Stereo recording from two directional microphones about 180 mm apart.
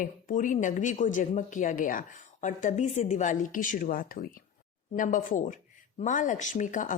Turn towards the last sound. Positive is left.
turn(degrees=45)  # may be behind; listen again after turning